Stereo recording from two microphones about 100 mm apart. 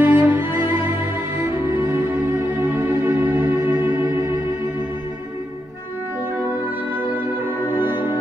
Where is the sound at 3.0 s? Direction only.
20° right (ahead or behind).